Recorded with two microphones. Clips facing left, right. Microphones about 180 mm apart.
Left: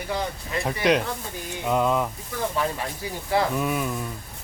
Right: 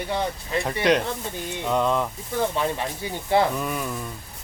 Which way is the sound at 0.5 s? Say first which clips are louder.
Right 1 dB; centre (ahead or behind).